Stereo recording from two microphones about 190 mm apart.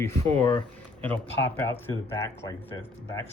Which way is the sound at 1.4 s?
10° left (ahead or behind).